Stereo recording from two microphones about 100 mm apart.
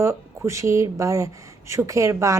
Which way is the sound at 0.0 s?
25° right (ahead or behind).